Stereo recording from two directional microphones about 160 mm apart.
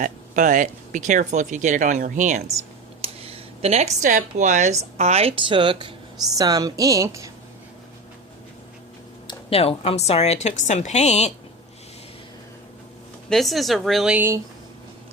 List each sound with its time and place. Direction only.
0.0 s speech: 55° right (ahead or behind)
3.0 s a woman's voice: 35° right (ahead or behind); by 7.3 s 20° right (ahead or behind)
9.2 s a woman's voice: 40° left (ahead or behind)
13.3 s a woman's voice: centre (ahead or behind)